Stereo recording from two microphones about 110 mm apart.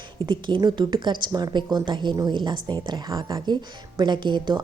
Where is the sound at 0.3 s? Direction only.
45° right (ahead or behind).